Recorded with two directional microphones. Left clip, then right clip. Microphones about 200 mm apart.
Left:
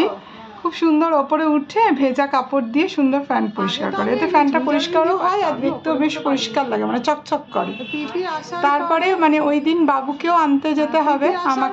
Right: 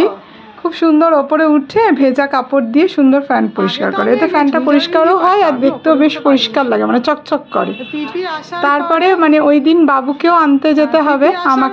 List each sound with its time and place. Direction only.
0.7 s speech: 20° right (ahead or behind)